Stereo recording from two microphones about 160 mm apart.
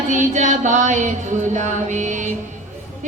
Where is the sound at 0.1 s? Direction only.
50° right (ahead or behind).